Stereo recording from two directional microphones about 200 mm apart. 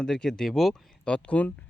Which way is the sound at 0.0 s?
5° left (ahead or behind).